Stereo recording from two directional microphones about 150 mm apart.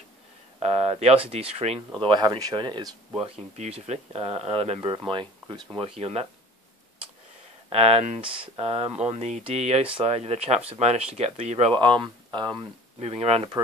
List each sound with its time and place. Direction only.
0.6 s speech: 45° right (ahead or behind)
2.0 s speech: 25° right (ahead or behind)
3.5 s speech: 50° right (ahead or behind)
4.8 s speech: 30° right (ahead or behind)
5.8 s speech: 40° right (ahead or behind)
7.7 s speech: 45° right (ahead or behind)
13.0 s speech: 40° right (ahead or behind)